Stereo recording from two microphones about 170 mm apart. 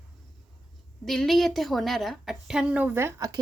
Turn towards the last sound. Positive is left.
turn(degrees=-15)  # may be behind; listen again after turning